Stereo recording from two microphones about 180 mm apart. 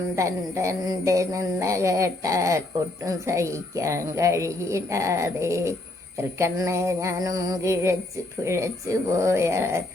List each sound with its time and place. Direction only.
0.2 s music: 15° right (ahead or behind)